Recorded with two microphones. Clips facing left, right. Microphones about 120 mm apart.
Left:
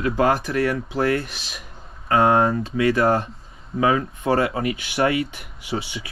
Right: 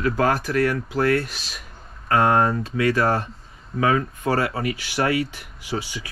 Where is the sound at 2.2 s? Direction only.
Centre (ahead or behind).